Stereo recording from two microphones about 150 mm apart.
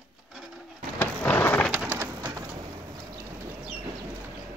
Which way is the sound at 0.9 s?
15° left (ahead or behind).